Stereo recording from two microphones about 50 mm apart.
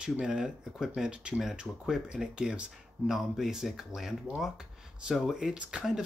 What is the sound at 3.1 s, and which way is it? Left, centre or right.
Speech, centre.